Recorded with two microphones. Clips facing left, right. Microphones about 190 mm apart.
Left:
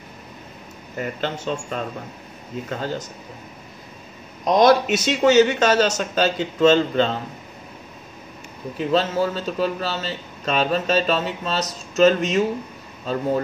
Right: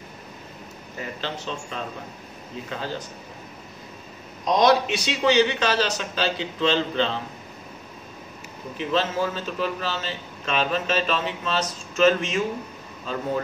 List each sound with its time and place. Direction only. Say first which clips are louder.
0.9 s speech: left 6 dB; 50° left (ahead or behind)
4.5 s speech: left 4 dB; 50° left (ahead or behind)
8.7 s a man's voice: left 4 dB; 40° left (ahead or behind)